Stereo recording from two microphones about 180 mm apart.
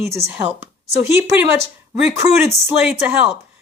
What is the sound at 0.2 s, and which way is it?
Speech, 35° right (ahead or behind).